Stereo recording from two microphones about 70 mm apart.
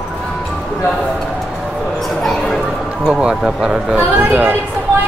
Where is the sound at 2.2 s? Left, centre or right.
Centre.